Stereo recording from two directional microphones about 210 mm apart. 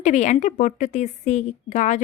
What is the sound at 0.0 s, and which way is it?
Speech, 35° left (ahead or behind).